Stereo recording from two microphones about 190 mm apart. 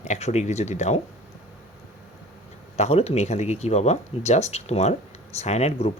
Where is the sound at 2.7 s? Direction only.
35° left (ahead or behind).